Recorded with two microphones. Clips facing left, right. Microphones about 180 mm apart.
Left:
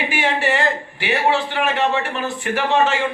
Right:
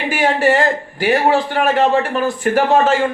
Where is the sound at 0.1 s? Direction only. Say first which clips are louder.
Right 9 dB; 45° right (ahead or behind).